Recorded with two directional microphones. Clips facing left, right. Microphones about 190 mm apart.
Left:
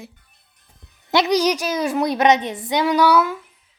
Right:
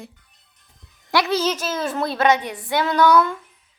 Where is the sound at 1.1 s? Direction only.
20° left (ahead or behind).